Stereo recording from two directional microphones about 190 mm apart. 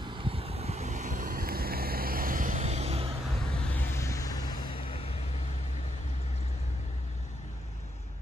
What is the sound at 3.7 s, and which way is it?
Vehicle, 10° left (ahead or behind).